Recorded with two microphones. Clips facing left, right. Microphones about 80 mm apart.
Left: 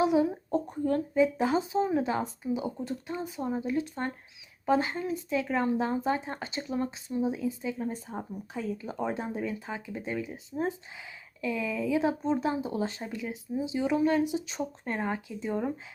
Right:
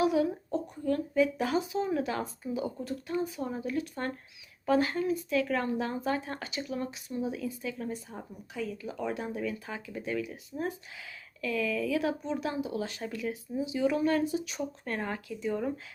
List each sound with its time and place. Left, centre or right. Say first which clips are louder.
0.0 s a sound: left 2 dB; left
0.5 s speech: left 4 dB; left
8.0 s speech: left 6 dB; left
13.0 s speech: right 1 dB; centre